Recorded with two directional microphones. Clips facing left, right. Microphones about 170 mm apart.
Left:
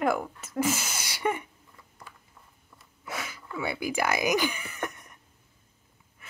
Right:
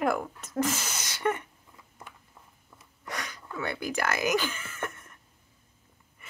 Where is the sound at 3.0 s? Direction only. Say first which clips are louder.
Left 1 dB; 5° left (ahead or behind).